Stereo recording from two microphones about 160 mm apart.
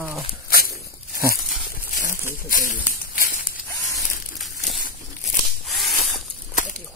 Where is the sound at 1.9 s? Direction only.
55° left (ahead or behind).